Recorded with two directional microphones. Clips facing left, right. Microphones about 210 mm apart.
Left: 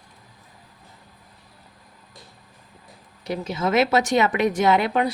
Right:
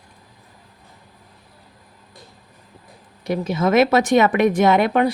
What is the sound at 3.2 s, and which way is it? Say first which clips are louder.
Speech: right 5 dB; 50° right (ahead or behind).